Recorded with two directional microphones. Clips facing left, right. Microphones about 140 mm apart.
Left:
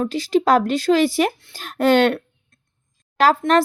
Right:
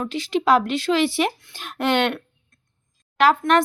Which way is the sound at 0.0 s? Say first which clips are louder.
Left 4 dB; 40° left (ahead or behind).